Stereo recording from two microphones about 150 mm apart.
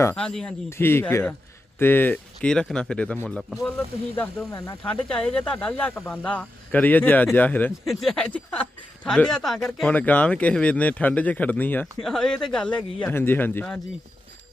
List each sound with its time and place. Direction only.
0.2 s a sound: 5° left (ahead or behind)
0.7 s speech: 15° left (ahead or behind)
4.5 s speech: 20° left (ahead or behind)
5.0 s speech: 5° left (ahead or behind)
7.9 s a sound: 5° left (ahead or behind)
9.0 s speech: 5° left (ahead or behind)